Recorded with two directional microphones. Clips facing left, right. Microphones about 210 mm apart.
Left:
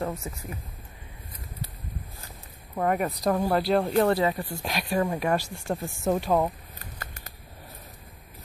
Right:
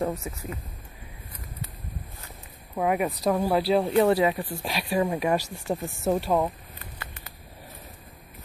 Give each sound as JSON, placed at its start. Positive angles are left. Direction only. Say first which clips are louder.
{"t": 0.0, "sound": "speech", "louder": "right 3 dB", "side_deg": -10}
{"t": 2.7, "sound": "speech", "louder": "right 1 dB", "side_deg": -5}
{"t": 6.8, "sound": "a sound", "louder": "left 1 dB", "side_deg": 40}